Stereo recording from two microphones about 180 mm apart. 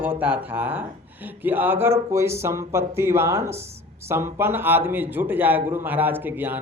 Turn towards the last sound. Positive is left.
turn(degrees=-10)  # may be behind; listen again after turning